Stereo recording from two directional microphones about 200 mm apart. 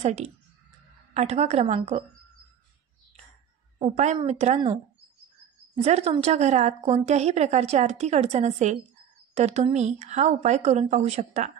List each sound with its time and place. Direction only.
0.0 s speech: 35° right (ahead or behind)
3.8 s speech: 35° right (ahead or behind)
5.8 s speech: 35° right (ahead or behind)